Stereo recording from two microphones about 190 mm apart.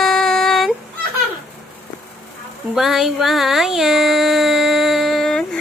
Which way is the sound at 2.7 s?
Centre (ahead or behind).